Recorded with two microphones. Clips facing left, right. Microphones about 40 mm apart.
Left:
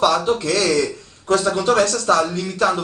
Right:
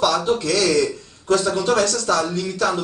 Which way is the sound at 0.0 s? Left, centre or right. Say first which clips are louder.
Left 2 dB; centre.